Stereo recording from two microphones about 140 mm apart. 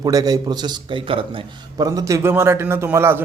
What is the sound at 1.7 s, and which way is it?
A man's voice, 25° right (ahead or behind).